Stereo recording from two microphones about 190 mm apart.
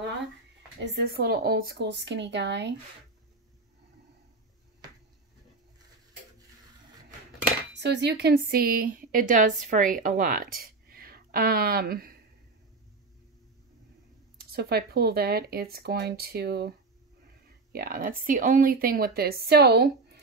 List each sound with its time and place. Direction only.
0.7 s speech: 65° right (ahead or behind)
7.8 s a woman's voice: 60° right (ahead or behind)
14.4 s speech: 55° right (ahead or behind)
17.7 s speech: 50° right (ahead or behind)